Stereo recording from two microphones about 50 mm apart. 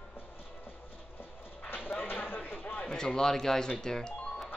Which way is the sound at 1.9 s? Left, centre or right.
Left.